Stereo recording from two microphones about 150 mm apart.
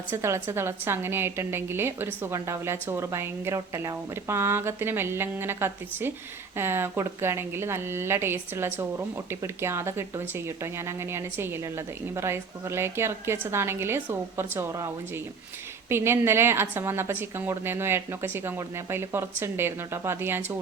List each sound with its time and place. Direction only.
0.1 s a woman's voice: 15° right (ahead or behind)